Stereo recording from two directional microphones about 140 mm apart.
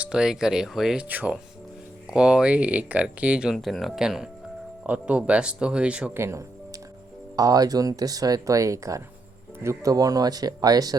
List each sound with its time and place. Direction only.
0.0 s speech: 5° right (ahead or behind)
6.1 s speech: 20° right (ahead or behind)